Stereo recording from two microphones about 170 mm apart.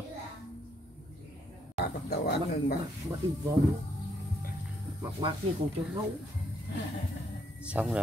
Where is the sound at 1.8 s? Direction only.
60° left (ahead or behind).